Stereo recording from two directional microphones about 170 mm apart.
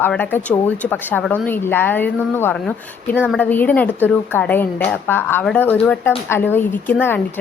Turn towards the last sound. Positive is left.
turn(degrees=10)  # may be behind; listen again after turning